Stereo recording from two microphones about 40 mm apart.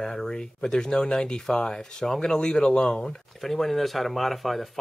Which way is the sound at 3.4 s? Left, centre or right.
Centre.